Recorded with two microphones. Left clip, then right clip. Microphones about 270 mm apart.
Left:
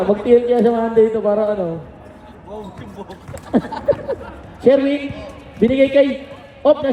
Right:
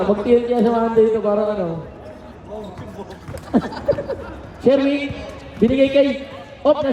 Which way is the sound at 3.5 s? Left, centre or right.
Centre.